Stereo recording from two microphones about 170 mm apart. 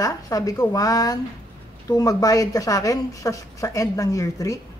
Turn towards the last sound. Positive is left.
turn(degrees=20)  # may be behind; listen again after turning